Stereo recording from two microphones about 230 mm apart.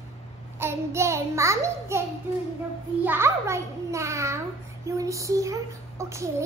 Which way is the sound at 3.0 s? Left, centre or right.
Centre.